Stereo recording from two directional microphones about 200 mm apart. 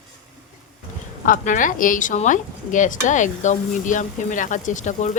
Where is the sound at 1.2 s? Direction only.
40° left (ahead or behind).